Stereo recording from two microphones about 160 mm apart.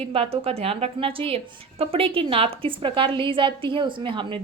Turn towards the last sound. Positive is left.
turn(degrees=-30)  # may be behind; listen again after turning